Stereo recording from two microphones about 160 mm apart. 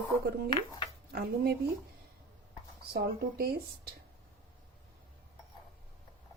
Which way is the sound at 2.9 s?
90° right.